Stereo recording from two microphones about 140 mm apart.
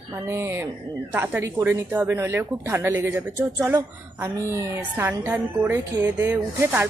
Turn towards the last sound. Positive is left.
turn(degrees=-15)  # may be behind; listen again after turning